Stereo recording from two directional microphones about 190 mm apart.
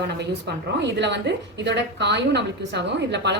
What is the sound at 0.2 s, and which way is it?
A woman's voice, 65° right (ahead or behind).